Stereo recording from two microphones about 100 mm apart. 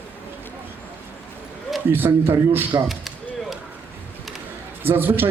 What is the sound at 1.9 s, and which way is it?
Speech, 20° right (ahead or behind).